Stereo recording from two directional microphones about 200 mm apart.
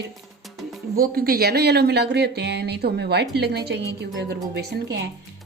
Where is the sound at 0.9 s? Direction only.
50° right (ahead or behind).